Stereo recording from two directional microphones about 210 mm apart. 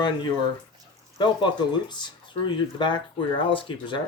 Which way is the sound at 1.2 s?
20° left (ahead or behind).